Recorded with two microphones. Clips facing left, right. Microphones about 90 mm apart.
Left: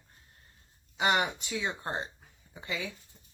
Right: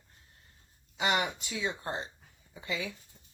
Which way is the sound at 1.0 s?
30° left (ahead or behind).